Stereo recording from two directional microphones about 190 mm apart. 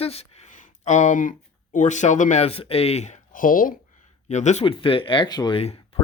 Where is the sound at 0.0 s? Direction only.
30° left (ahead or behind).